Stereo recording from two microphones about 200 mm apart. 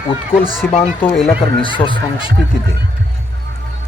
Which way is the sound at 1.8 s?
25° left (ahead or behind).